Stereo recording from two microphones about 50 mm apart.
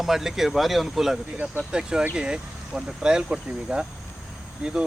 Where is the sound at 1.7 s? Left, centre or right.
Centre.